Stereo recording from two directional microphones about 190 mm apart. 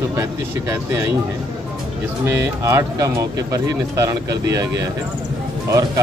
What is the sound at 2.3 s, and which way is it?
Speech, 15° right (ahead or behind).